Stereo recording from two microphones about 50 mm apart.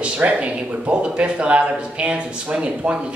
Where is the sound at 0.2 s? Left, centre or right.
Right.